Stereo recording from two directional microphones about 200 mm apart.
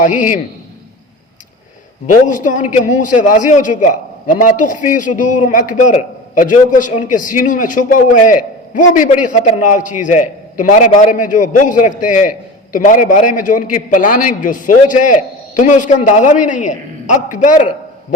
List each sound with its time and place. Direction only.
0.0 s a man's voice: 40° left (ahead or behind)
2.2 s a man's voice: 40° left (ahead or behind)